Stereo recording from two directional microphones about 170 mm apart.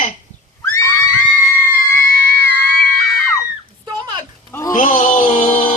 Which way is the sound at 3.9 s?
25° right (ahead or behind).